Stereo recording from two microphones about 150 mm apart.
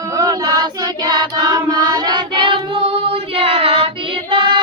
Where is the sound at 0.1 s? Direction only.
25° right (ahead or behind).